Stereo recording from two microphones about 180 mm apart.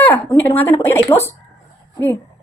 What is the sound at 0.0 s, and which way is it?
A woman's voice, 10° left (ahead or behind).